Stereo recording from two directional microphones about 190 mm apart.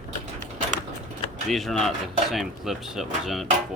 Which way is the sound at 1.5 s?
Centre (ahead or behind).